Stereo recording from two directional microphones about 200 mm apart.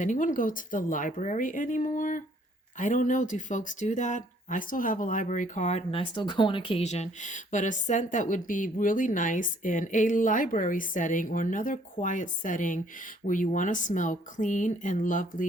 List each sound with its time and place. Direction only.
0.0 s speech: 40° left (ahead or behind)